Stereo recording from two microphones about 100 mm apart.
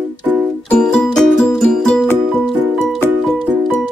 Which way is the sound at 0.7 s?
5° left (ahead or behind).